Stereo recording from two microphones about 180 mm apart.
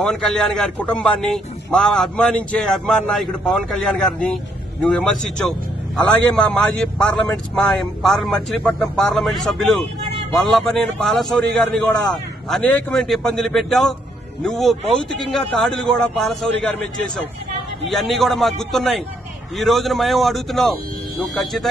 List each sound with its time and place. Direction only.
0.0 s a man's voice: 5° left (ahead or behind)
17.8 s a man's voice: centre (ahead or behind)